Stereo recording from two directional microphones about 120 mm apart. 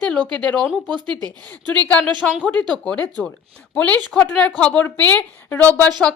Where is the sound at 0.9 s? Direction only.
40° right (ahead or behind).